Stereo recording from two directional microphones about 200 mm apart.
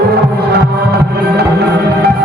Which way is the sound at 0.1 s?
50° right (ahead or behind).